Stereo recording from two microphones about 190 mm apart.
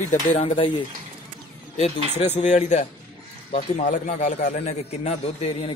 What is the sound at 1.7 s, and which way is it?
A man's voice, 35° left (ahead or behind).